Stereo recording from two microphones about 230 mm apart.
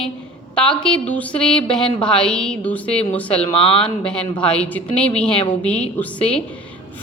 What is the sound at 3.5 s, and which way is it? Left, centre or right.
Speech, left.